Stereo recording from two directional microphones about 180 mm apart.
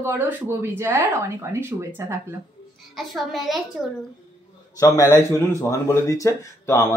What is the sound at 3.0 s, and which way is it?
Speech, centre (ahead or behind).